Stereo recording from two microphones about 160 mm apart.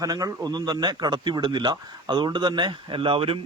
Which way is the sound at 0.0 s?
20° right (ahead or behind).